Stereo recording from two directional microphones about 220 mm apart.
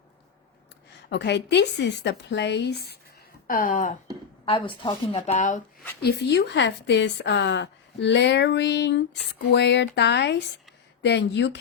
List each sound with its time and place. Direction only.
1.1 s a woman's voice: 50° left (ahead or behind)
3.4 s speech: 40° left (ahead or behind)
4.4 s a woman's voice: 25° left (ahead or behind)
6.0 s a woman's voice: 50° left (ahead or behind)